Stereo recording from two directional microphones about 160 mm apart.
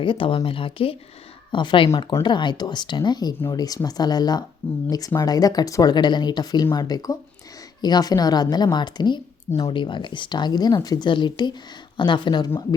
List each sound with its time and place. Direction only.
0.0 s speech: 30° left (ahead or behind)